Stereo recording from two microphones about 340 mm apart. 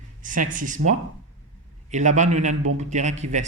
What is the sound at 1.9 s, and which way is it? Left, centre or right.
A man's voice, right.